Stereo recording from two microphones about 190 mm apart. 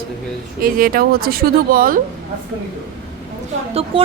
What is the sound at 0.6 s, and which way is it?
Speech, 50° right (ahead or behind).